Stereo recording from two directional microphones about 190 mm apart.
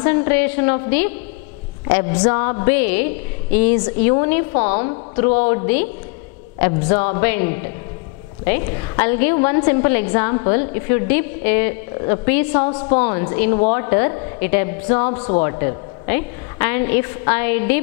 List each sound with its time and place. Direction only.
0.0 s a woman's voice: 15° left (ahead or behind)
6.6 s a woman's voice: 10° left (ahead or behind)
15.0 s speech: 35° left (ahead or behind)
15.4 s a woman's voice: 15° left (ahead or behind)